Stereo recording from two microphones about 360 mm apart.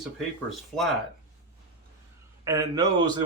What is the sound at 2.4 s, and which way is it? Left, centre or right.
Speech, centre.